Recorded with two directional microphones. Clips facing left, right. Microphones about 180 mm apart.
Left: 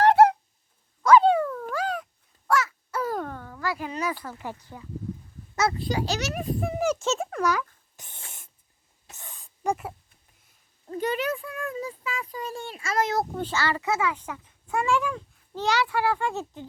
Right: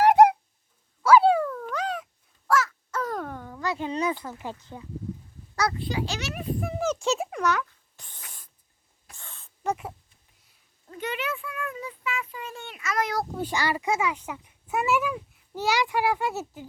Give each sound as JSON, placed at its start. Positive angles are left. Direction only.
{"t": 0.0, "sound": "a sound", "side_deg": -10}
{"t": 1.0, "sound": "dog", "side_deg": -5}
{"t": 2.5, "sound": "a sound", "side_deg": 0}
{"t": 3.2, "sound": "speech", "side_deg": -10}
{"t": 5.7, "sound": "a child's voice", "side_deg": 40}
{"t": 6.7, "sound": "speech", "side_deg": 15}
{"t": 7.0, "sound": "a child's voice", "side_deg": 0}
{"t": 7.9, "sound": "snort", "side_deg": 20}
{"t": 9.0, "sound": "owl", "side_deg": 20}
{"t": 10.8, "sound": "a child's voice", "side_deg": 35}
{"t": 13.3, "sound": "a child's voice", "side_deg": -15}